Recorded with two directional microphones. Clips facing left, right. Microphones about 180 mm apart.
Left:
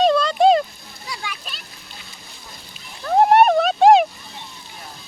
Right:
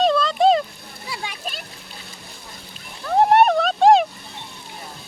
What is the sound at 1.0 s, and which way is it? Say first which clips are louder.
Splash: even; 30° right (ahead or behind).